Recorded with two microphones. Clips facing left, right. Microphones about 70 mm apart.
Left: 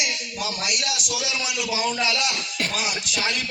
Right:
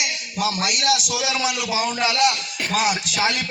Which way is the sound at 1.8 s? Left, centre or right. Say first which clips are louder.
Right 6 dB; right.